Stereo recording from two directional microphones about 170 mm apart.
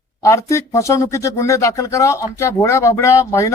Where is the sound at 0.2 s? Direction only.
15° left (ahead or behind).